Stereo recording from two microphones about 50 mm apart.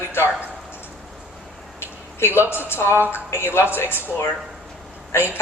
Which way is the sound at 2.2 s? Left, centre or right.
Left.